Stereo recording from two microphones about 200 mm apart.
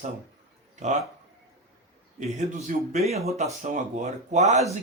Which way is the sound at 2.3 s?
35° right (ahead or behind).